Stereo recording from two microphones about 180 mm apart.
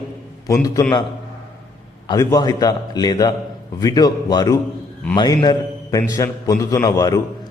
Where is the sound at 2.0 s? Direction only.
20° left (ahead or behind).